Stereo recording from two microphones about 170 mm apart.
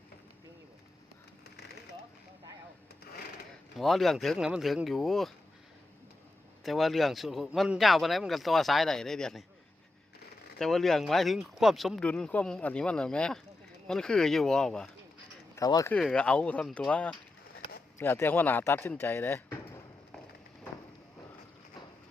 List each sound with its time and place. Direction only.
3.8 s speech: centre (ahead or behind)
6.7 s speech: centre (ahead or behind)
10.6 s speech: centre (ahead or behind)
15.5 s speech: 20° left (ahead or behind)
15.9 s speech: 5° left (ahead or behind)